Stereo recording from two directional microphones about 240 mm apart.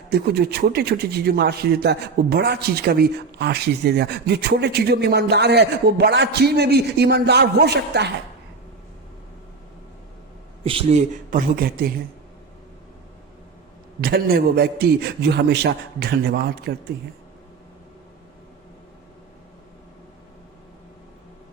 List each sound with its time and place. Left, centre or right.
0.1 s speech: right
10.6 s a man's voice: right
14.0 s a man's voice: right